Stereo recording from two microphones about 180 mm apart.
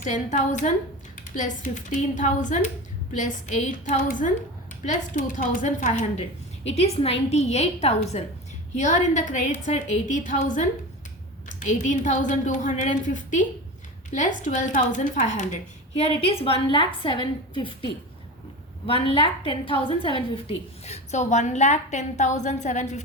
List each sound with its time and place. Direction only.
0.0 s a woman's voice: 45° left (ahead or behind); by 17.7 s 25° left (ahead or behind)
18.9 s a woman's voice: 30° left (ahead or behind)